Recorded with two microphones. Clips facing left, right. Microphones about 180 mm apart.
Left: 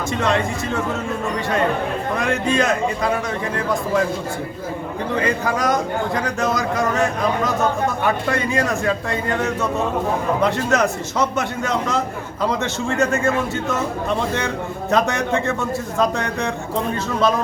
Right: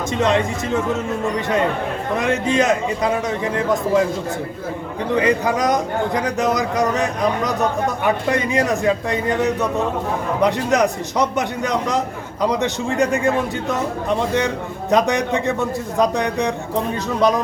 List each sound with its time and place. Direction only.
0.2 s a man's voice: 20° right (ahead or behind)
2.1 s a man's voice: 20° right (ahead or behind)
5.1 s a man's voice: 20° right (ahead or behind)